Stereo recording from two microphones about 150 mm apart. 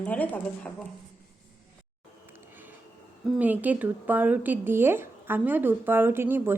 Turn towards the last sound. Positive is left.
turn(degrees=-15)  # may be behind; listen again after turning